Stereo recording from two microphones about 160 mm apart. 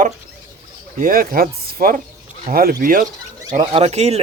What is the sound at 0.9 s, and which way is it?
Speech, 60° right (ahead or behind).